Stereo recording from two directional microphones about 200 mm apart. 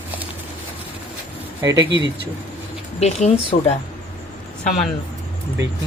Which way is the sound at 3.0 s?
35° left (ahead or behind).